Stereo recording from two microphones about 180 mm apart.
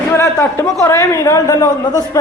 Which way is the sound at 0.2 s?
15° left (ahead or behind).